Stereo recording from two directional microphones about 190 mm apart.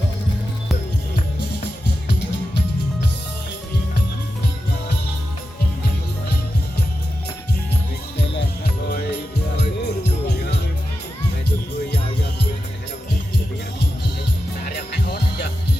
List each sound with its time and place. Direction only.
9.6 s music: 60° left (ahead or behind)
14.6 s music: 60° left (ahead or behind)